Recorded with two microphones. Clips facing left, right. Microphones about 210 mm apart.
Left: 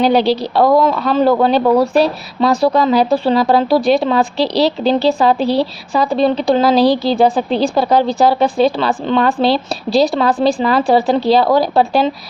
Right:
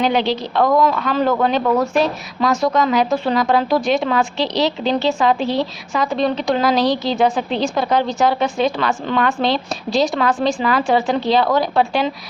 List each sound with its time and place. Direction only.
0.0 s speech: 35° left (ahead or behind)